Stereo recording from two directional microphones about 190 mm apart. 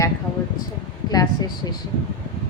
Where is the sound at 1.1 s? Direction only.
20° left (ahead or behind).